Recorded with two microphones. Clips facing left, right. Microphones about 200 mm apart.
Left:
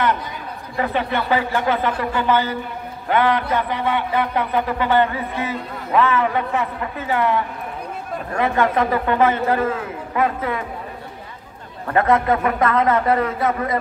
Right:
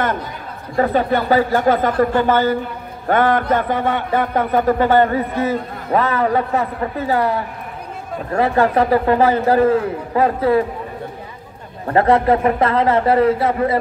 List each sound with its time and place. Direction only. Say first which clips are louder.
0.7 s a man's voice: right 6 dB; 40° right (ahead or behind)
11.9 s a man's voice: right 3 dB; 30° right (ahead or behind)